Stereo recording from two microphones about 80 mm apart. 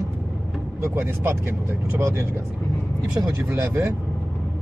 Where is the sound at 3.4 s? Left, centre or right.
Right.